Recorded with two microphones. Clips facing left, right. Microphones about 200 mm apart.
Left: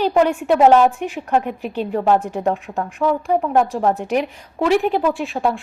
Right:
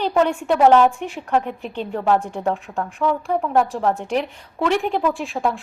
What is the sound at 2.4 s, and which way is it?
A woman's voice, 15° left (ahead or behind).